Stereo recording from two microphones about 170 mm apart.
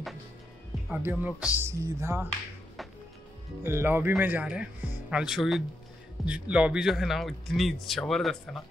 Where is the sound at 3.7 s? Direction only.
15° right (ahead or behind).